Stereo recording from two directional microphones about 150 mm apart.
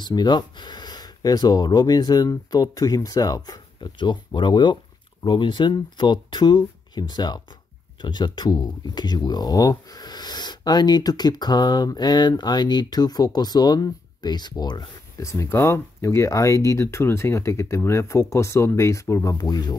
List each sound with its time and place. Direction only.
0.0 s speech: 30° left (ahead or behind)